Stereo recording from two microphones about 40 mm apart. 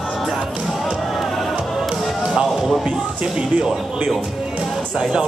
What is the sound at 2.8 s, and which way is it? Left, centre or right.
Speech, right.